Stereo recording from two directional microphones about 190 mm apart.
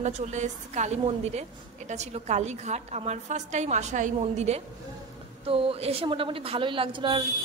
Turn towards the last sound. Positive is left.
turn(degrees=-25)  # may be behind; listen again after turning